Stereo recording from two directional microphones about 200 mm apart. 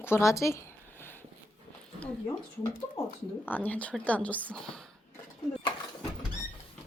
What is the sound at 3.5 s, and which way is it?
A woman's voice, 10° left (ahead or behind).